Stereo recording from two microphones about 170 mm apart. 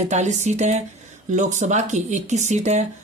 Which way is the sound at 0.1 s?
45° right (ahead or behind).